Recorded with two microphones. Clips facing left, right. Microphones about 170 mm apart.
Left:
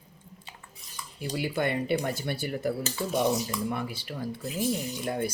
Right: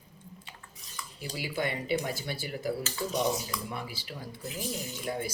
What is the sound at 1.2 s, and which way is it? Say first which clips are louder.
Speech: left 4 dB; 55° left (ahead or behind).